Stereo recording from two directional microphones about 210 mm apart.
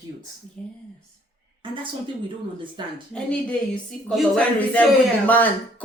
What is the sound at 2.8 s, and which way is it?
Speech, 20° right (ahead or behind).